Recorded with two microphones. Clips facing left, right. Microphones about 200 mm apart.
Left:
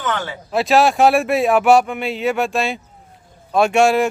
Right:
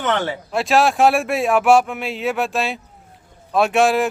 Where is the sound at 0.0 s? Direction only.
25° right (ahead or behind).